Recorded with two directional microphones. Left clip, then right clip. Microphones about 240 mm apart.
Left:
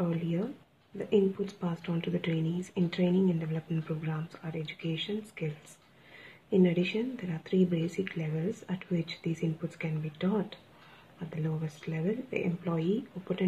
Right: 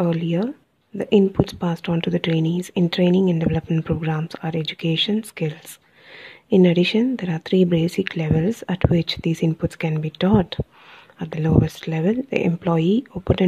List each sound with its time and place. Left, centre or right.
0.0 s speech: right
6.5 s speech: right